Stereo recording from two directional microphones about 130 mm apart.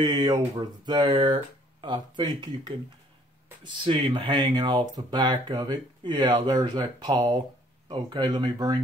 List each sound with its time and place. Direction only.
0.0 s speech: 30° right (ahead or behind)